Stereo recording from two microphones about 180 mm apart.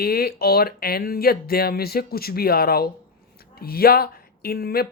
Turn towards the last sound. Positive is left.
turn(degrees=60)  # may be behind; listen again after turning